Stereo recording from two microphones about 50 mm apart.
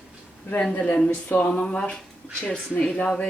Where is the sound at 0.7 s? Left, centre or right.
Left.